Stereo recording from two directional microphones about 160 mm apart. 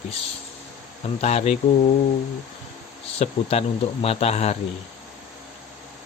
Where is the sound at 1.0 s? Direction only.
40° left (ahead or behind).